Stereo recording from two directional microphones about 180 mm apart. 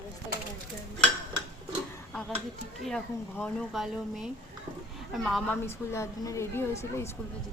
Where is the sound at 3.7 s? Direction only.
Centre (ahead or behind).